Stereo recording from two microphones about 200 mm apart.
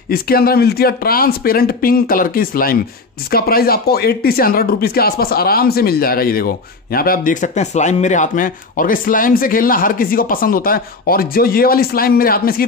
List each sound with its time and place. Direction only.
0.1 s speech: 50° left (ahead or behind)